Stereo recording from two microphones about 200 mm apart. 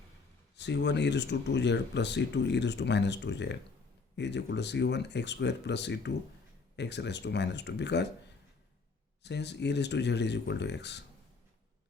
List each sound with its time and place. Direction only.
0.5 s speech: 60° left (ahead or behind)
9.2 s speech: 60° left (ahead or behind)